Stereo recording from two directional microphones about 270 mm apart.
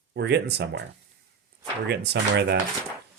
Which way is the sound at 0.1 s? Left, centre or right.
Right.